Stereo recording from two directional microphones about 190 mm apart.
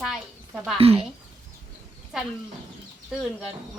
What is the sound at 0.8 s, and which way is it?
Speech, 30° right (ahead or behind).